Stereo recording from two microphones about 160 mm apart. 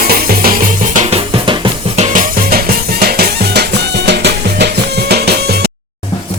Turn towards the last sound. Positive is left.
turn(degrees=-85)